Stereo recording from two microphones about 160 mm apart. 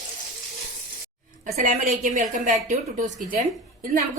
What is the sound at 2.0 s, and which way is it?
A woman's voice, 55° right (ahead or behind).